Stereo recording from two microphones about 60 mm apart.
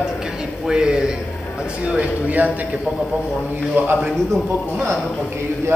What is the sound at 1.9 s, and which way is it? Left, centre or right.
Speech, right.